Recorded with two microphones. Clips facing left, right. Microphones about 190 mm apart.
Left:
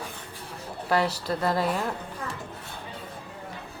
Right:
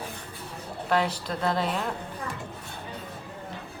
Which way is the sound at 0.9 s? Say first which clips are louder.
Left 1 dB; 5° left (ahead or behind).